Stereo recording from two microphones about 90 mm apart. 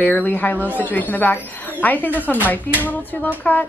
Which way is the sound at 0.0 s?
20° left (ahead or behind).